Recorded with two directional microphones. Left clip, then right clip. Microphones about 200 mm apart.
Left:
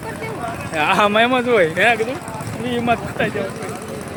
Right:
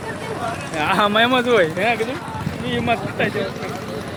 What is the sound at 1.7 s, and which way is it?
Speech, 50° left (ahead or behind).